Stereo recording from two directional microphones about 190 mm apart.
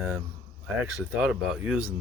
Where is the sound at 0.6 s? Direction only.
5° right (ahead or behind).